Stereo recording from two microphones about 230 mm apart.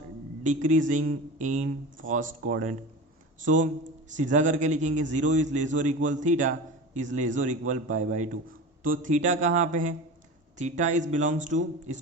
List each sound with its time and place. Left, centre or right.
0.4 s a man's voice: right